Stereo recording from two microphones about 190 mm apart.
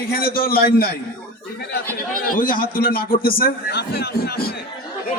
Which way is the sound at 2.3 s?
45° left (ahead or behind).